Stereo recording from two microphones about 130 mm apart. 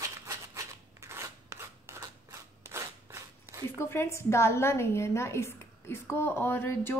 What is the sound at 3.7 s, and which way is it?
A woman's voice, 20° left (ahead or behind).